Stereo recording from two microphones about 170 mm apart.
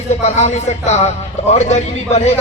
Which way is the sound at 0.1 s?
40° left (ahead or behind).